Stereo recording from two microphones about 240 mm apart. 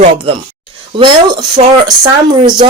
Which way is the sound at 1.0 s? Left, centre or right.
Centre.